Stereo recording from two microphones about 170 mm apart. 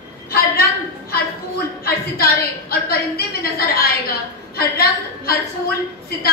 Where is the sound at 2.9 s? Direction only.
65° left (ahead or behind).